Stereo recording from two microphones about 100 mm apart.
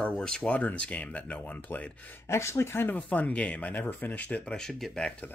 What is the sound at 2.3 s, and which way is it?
Speech, 25° left (ahead or behind).